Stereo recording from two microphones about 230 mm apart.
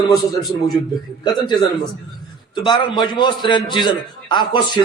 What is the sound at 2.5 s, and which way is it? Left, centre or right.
A man's voice, centre.